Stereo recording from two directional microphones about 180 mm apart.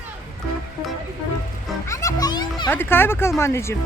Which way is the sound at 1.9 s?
15° left (ahead or behind).